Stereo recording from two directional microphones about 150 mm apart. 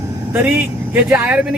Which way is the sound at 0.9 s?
15° right (ahead or behind).